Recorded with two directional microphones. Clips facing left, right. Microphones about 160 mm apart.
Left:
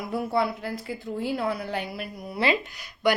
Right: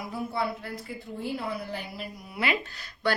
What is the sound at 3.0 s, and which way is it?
Speech, 15° left (ahead or behind).